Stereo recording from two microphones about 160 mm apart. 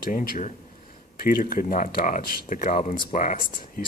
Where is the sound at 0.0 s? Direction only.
60° left (ahead or behind).